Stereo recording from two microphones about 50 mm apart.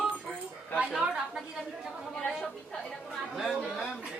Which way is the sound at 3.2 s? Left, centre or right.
Centre.